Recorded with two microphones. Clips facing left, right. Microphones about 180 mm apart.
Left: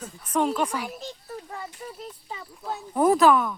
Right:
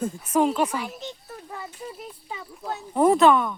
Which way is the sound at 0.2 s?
5° right (ahead or behind).